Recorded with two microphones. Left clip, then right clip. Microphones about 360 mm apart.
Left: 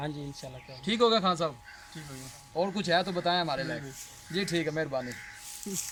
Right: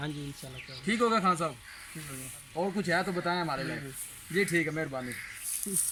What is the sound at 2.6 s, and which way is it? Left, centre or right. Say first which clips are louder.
Speech: left 2 dB; centre.